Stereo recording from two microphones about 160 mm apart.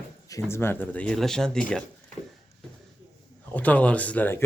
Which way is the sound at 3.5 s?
10° left (ahead or behind).